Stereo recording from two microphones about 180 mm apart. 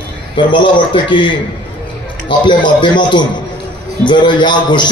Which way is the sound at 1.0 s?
25° left (ahead or behind).